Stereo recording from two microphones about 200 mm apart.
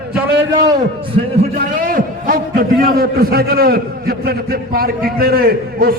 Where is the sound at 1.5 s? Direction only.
45° right (ahead or behind).